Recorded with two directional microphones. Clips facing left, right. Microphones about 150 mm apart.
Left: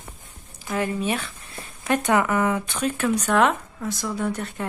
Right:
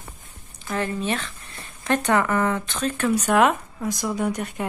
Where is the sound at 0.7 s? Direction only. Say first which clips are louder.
Left 1 dB; 10° left (ahead or behind).